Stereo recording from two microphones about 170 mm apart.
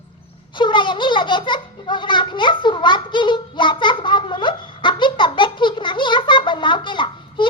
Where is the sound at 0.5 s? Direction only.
30° left (ahead or behind).